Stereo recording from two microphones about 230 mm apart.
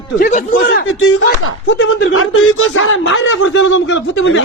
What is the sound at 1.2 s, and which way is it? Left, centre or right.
Speech, left.